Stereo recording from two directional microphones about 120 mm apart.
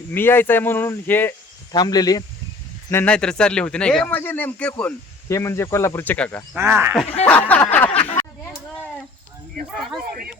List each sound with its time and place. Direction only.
0.1 s speech: 20° left (ahead or behind)
1.7 s speech: 35° left (ahead or behind)
2.9 s speech: 15° left (ahead or behind)
5.3 s speech: 20° left (ahead or behind)
6.6 s speech: 20° right (ahead or behind)
6.9 s speech: 5° left (ahead or behind)
7.3 s a sound: 10° left (ahead or behind)